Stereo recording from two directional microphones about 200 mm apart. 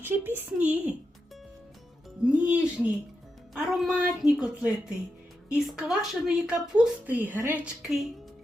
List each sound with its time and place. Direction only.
0.0 s speech: 10° right (ahead or behind)
2.2 s speech: 5° right (ahead or behind)